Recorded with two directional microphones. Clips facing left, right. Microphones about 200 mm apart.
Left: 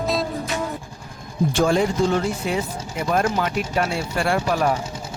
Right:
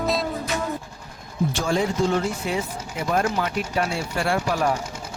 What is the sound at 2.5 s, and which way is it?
Speech, 60° left (ahead or behind).